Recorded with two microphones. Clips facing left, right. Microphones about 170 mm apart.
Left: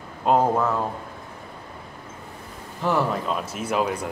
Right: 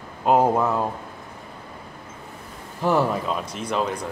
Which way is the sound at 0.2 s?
10° right (ahead or behind).